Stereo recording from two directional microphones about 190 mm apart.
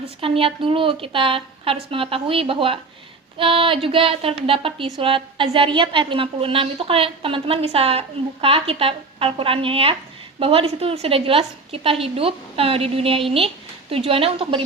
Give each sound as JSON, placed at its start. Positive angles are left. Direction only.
{"t": 0.2, "sound": "a woman's voice", "side_deg": -30}